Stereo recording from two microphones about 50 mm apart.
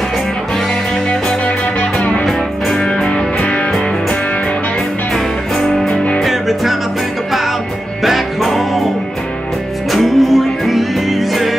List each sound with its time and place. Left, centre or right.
2.8 s music: centre
5.1 s music: centre
8.0 s music: centre
9.8 s music: centre